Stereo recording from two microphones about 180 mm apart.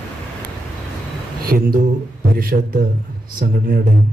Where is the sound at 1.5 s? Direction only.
55° right (ahead or behind).